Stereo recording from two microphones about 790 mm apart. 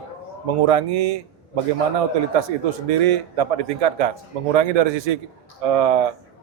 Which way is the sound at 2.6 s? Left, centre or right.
Right.